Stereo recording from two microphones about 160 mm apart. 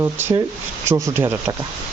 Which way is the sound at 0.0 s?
15° right (ahead or behind).